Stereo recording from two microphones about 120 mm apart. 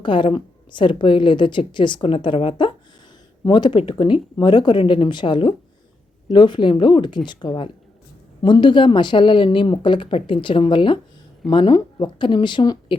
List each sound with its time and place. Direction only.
0.0 s a woman's voice: 40° left (ahead or behind)